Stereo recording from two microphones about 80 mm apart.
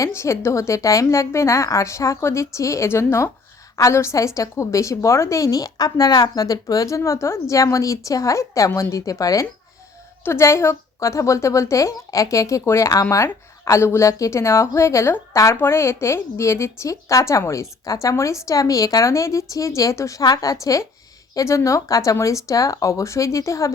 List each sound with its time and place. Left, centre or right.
0.0 s a woman's voice: left
10.2 s a woman's voice: left